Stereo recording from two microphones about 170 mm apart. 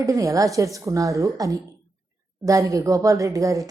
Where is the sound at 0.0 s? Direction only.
20° right (ahead or behind).